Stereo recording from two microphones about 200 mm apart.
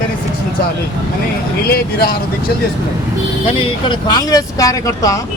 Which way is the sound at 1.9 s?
50° left (ahead or behind).